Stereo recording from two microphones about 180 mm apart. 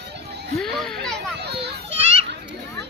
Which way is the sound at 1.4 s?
65° right (ahead or behind).